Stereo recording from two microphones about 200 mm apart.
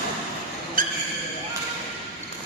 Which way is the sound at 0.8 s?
45° right (ahead or behind).